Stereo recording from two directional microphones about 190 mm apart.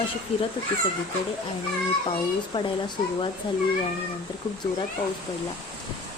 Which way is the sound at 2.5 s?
25° left (ahead or behind).